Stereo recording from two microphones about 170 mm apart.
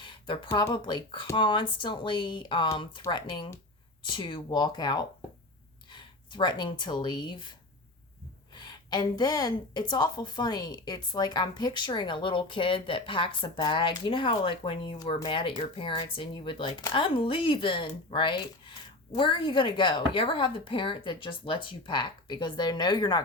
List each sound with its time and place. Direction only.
0.5 s a woman's voice: 25° left (ahead or behind)
8.5 s a woman's voice: 25° left (ahead or behind)